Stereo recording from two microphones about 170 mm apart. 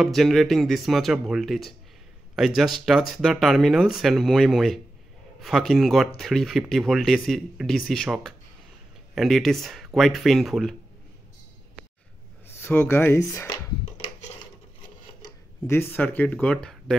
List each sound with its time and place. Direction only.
0.0 s speech: centre (ahead or behind)
12.4 s speech: 15° left (ahead or behind)
15.2 s speech: 15° left (ahead or behind)